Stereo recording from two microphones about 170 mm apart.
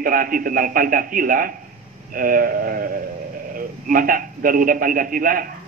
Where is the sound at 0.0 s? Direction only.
55° right (ahead or behind).